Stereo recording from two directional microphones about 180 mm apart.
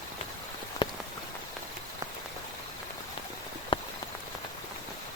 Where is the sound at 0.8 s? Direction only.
25° left (ahead or behind).